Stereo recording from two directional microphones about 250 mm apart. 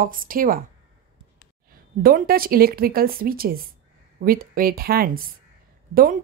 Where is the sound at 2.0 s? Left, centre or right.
Right.